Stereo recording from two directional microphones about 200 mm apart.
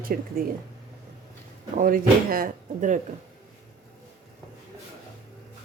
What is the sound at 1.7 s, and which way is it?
Speech, 45° right (ahead or behind).